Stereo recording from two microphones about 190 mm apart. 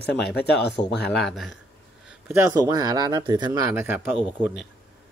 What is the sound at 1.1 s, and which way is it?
Speech, centre (ahead or behind).